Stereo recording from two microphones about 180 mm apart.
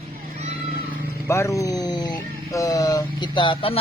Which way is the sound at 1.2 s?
15° left (ahead or behind).